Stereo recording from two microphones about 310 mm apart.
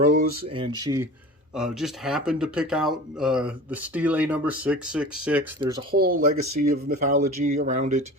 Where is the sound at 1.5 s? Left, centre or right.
Centre.